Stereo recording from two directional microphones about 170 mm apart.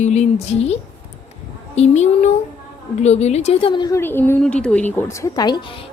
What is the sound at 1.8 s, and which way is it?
A woman's voice, 40° left (ahead or behind).